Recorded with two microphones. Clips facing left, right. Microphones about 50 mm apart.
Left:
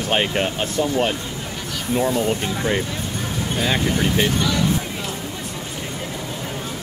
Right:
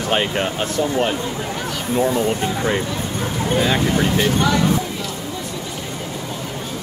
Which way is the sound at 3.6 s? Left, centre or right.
Centre.